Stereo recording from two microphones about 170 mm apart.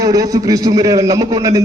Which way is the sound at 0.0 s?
20° right (ahead or behind).